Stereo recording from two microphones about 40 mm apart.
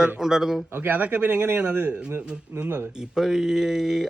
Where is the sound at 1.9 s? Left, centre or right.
Right.